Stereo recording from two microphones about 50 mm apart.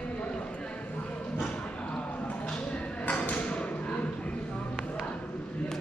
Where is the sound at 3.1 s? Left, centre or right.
Left.